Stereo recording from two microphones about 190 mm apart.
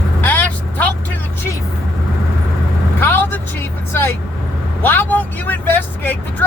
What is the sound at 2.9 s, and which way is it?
Vehicle, 10° left (ahead or behind).